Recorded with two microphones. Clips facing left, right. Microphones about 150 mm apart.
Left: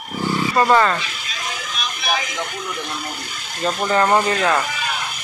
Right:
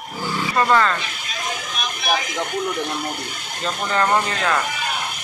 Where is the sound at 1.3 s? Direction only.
50° right (ahead or behind).